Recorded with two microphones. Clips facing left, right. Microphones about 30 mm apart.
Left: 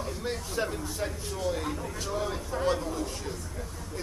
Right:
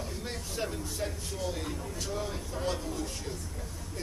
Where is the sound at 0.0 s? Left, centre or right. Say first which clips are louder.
Left 5 dB; centre.